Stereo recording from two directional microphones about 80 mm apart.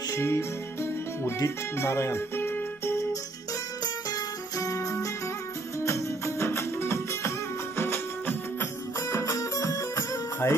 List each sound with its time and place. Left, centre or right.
0.1 s music: left
1.2 s speech: left
3.8 s music: left
9.1 s music: left